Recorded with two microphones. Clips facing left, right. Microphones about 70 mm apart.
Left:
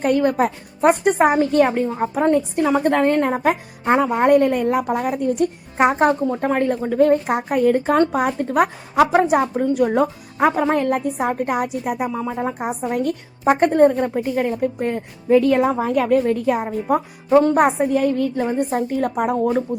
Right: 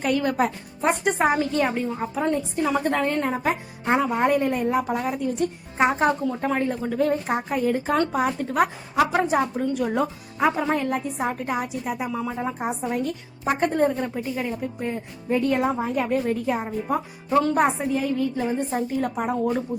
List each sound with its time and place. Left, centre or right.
0.0 s a woman's voice: left
2.3 s speech: left
2.8 s a woman's voice: left
7.9 s a woman's voice: left
12.1 s speech: left
12.5 s a woman's voice: centre
12.9 s a woman's voice: left
16.9 s speech: left
17.6 s speech: left
18.4 s a woman's voice: centre
18.7 s a woman's voice: left